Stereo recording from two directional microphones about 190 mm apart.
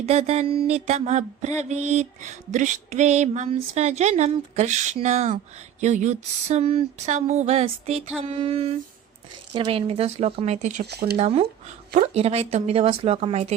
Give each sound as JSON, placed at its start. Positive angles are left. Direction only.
{"t": 0.0, "sound": "mantra", "side_deg": -30}
{"t": 8.2, "sound": "female singing", "side_deg": -30}
{"t": 9.5, "sound": "mantra", "side_deg": -25}
{"t": 10.8, "sound": "speech", "side_deg": -60}
{"t": 11.2, "sound": "mantra", "side_deg": -30}